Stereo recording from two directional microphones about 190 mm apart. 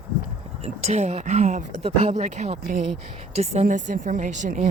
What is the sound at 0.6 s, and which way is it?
Speech, 35° right (ahead or behind).